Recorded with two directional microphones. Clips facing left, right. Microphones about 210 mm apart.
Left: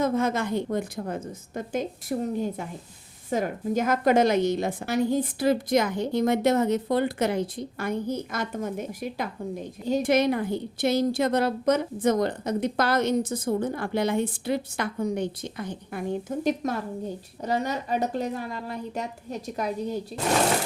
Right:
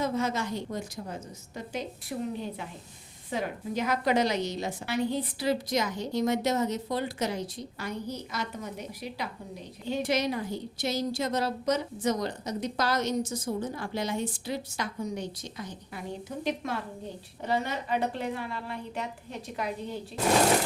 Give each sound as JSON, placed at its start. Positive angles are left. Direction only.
{"t": 0.0, "sound": "a woman's voice", "side_deg": 50}